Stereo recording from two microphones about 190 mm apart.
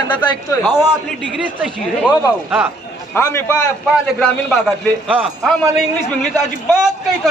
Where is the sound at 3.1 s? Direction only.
10° left (ahead or behind).